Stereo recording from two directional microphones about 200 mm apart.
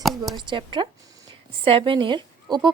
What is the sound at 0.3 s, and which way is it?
A woman's voice, 25° right (ahead or behind).